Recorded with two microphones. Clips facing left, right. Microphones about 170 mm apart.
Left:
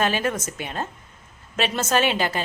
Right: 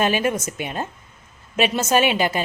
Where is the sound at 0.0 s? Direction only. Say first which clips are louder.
Right 3 dB; 15° right (ahead or behind).